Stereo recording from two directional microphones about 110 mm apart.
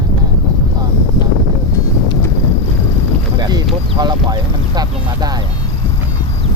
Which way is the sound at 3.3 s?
40° right (ahead or behind).